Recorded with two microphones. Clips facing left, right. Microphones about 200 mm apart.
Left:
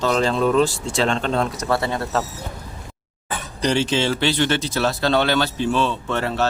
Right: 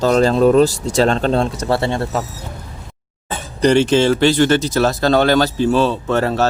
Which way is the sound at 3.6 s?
50° right (ahead or behind).